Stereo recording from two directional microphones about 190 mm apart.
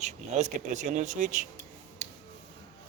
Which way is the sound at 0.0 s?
35° right (ahead or behind).